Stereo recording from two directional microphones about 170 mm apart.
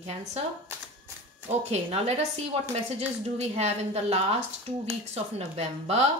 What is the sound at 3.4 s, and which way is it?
A woman's voice, 40° right (ahead or behind).